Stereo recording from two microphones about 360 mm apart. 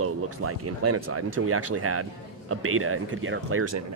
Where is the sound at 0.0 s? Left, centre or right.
Right.